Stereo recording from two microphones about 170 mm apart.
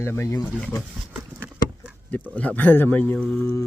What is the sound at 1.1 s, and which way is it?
Horse, 5° right (ahead or behind).